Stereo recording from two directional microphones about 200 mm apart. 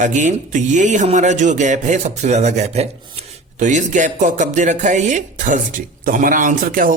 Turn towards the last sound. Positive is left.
turn(degrees=-40)  # may be behind; listen again after turning